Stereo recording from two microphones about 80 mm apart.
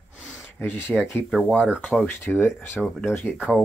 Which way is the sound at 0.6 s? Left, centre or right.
Left.